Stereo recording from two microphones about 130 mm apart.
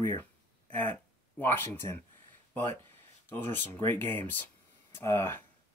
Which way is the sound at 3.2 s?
15° left (ahead or behind).